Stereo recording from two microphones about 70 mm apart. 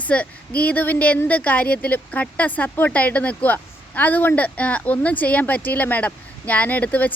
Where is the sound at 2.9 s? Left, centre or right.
Left.